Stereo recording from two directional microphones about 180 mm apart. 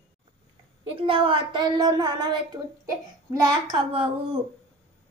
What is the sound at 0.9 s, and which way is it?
Speech, 30° right (ahead or behind).